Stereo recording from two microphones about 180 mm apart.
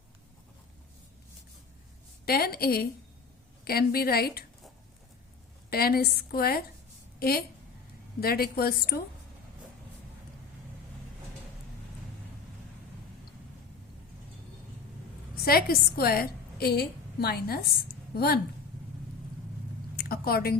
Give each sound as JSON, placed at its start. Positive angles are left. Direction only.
{"t": 2.2, "sound": "a woman's voice", "side_deg": 60}
{"t": 5.7, "sound": "a woman's voice", "side_deg": 60}
{"t": 15.4, "sound": "a woman's voice", "side_deg": 55}
{"t": 20.0, "sound": "a sound", "side_deg": 55}